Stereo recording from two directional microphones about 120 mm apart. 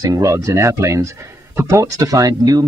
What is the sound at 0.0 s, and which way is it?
Speech, 25° right (ahead or behind).